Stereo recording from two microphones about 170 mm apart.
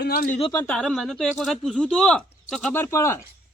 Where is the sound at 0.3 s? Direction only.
30° left (ahead or behind).